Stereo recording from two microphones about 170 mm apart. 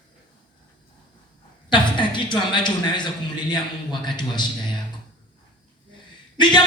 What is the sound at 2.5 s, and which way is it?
A man's voice, 25° left (ahead or behind).